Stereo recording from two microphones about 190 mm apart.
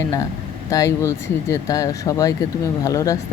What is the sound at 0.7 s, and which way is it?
Speech, 15° left (ahead or behind).